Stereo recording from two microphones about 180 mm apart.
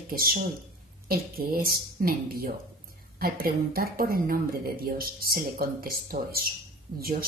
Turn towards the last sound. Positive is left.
turn(degrees=-55)  # may be behind; listen again after turning